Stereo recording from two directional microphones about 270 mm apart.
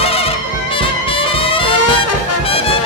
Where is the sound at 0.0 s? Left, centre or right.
Left.